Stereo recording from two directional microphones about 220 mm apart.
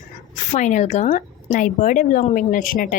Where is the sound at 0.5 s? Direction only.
35° left (ahead or behind).